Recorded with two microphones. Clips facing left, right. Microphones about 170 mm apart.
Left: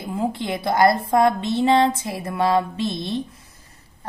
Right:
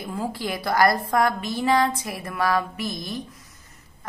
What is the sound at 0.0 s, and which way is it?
A woman's voice, 20° left (ahead or behind).